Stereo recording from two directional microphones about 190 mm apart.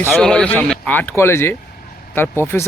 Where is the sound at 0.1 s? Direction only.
5° left (ahead or behind).